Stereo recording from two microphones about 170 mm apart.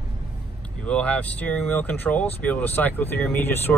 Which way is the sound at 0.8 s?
10° left (ahead or behind).